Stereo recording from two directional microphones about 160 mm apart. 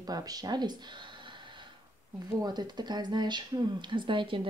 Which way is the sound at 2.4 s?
25° right (ahead or behind).